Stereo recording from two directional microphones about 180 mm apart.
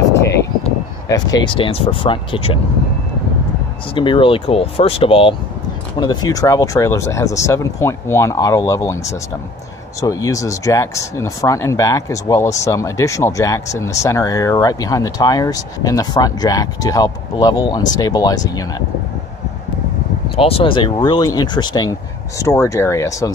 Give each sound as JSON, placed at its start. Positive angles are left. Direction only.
{"t": 1.0, "sound": "speech", "side_deg": 20}
{"t": 3.9, "sound": "speech", "side_deg": 30}
{"t": 20.3, "sound": "speech", "side_deg": 30}